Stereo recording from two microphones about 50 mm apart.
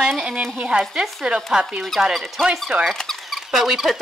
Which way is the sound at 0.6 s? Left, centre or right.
Right.